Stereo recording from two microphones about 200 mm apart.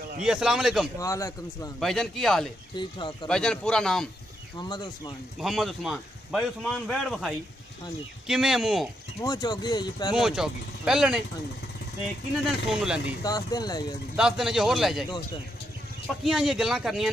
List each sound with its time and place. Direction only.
0.2 s speech: 5° right (ahead or behind)
0.9 s speech: 15° left (ahead or behind)
1.8 s speech: centre (ahead or behind)
2.7 s speech: 25° left (ahead or behind)
3.3 s speech: 5° left (ahead or behind)
4.6 s speech: 20° left (ahead or behind)
5.4 s speech: centre (ahead or behind)
9.2 s speech: 20° left (ahead or behind)
10.1 s speech: 5° right (ahead or behind)
12.6 s speech: 5° right (ahead or behind)
13.2 s speech: 20° left (ahead or behind)
14.1 s speech: centre (ahead or behind)
15.0 s speech: 25° left (ahead or behind)
16.3 s speech: centre (ahead or behind)